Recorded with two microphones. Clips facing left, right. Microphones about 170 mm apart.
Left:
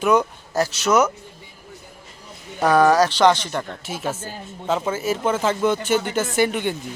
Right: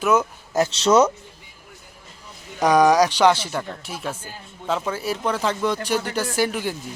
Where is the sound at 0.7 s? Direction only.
30° right (ahead or behind).